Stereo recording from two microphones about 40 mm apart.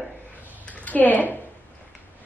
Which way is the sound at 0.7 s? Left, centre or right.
Left.